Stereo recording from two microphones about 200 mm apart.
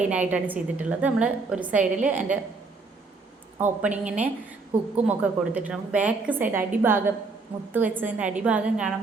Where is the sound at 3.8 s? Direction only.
5° right (ahead or behind).